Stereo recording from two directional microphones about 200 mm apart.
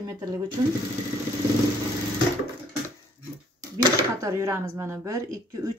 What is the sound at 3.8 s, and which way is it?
Speech, 15° right (ahead or behind).